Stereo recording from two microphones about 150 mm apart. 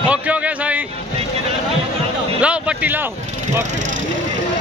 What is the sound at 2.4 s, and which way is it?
Speech, 10° right (ahead or behind).